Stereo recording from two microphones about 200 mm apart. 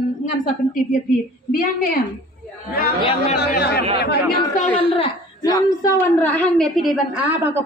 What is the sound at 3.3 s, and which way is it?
Speech, 55° left (ahead or behind).